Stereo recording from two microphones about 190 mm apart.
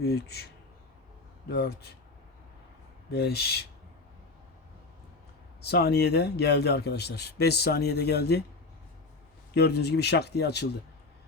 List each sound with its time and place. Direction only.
0.0 s speech: 55° left (ahead or behind)
3.1 s speech: 60° left (ahead or behind)
5.6 s speech: 60° left (ahead or behind)
9.6 s speech: 60° left (ahead or behind)